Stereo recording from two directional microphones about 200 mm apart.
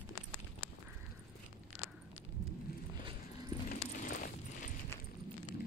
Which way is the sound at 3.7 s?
45° left (ahead or behind).